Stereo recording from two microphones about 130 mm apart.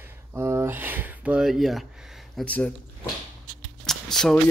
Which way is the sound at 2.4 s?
10° left (ahead or behind).